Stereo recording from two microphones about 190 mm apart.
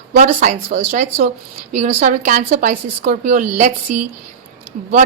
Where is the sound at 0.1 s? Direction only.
45° right (ahead or behind).